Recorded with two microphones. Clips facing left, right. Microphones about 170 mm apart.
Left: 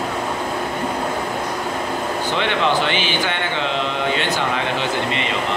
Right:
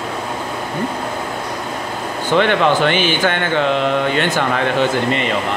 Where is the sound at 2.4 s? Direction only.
50° right (ahead or behind).